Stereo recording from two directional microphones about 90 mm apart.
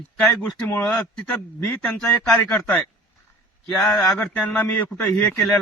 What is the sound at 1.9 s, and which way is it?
Speech, 10° left (ahead or behind).